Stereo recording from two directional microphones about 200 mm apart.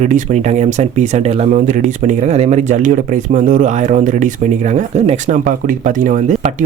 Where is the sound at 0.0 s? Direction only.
35° right (ahead or behind).